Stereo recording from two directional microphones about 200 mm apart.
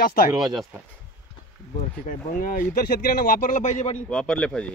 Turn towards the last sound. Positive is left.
turn(degrees=5)  # may be behind; listen again after turning